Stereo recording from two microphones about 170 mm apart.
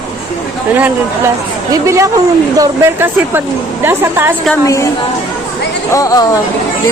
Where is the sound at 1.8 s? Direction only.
20° right (ahead or behind).